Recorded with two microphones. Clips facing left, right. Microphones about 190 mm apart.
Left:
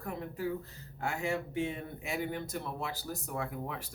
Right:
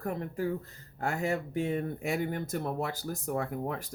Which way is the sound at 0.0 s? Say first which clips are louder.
Right 4 dB; 45° right (ahead or behind).